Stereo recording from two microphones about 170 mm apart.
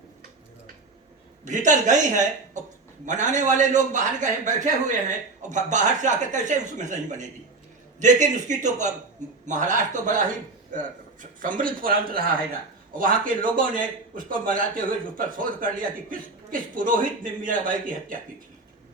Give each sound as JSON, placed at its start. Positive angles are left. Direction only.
{"t": 1.5, "sound": "a man's voice", "side_deg": -45}